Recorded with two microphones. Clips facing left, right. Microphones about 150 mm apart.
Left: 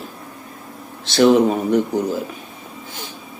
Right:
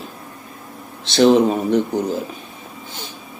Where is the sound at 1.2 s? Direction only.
30° right (ahead or behind).